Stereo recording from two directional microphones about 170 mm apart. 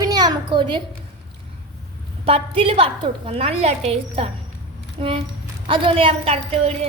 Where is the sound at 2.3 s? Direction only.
35° right (ahead or behind).